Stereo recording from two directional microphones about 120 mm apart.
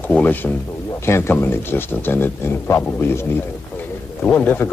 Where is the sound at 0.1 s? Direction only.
15° left (ahead or behind).